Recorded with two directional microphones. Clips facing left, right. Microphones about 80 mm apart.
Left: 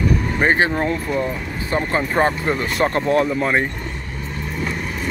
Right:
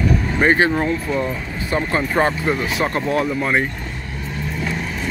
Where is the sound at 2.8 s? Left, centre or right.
Left.